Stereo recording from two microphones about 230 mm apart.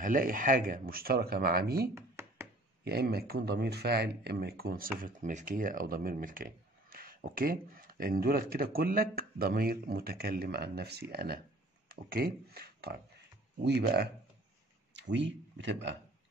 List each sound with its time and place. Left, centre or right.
0.0 s speech: right
2.0 s a sound: centre
2.8 s speech: right